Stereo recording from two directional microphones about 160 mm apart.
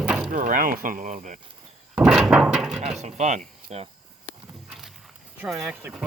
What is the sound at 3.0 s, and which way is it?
Speech, 45° right (ahead or behind).